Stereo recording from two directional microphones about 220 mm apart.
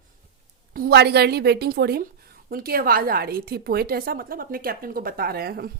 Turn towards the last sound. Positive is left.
turn(degrees=-45)  # may be behind; listen again after turning